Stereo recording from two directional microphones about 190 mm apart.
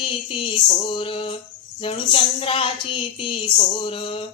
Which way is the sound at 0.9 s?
30° left (ahead or behind).